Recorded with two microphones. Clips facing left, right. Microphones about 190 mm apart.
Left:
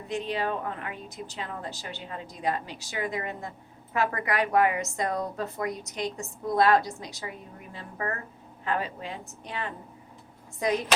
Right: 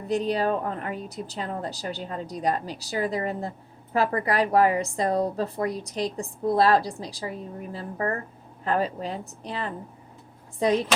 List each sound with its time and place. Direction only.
0.1 s a woman's voice: 40° right (ahead or behind)